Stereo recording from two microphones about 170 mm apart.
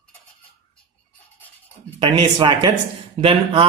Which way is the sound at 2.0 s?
30° right (ahead or behind).